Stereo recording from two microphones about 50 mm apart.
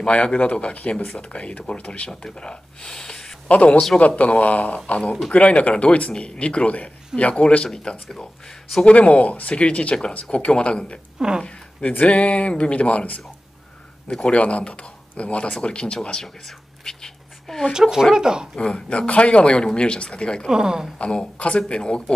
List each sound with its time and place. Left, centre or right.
0.0 s speech: left
3.4 s speech: left; by 8.8 s centre
8.8 s speech: left
11.1 s speech: centre
11.4 s a sound: left
12.1 s speech: left
14.2 s speech: left
16.4 s whispering: centre
17.7 s speech: centre
18.6 s speech: centre
20.4 s speech: centre
21.0 s speech: left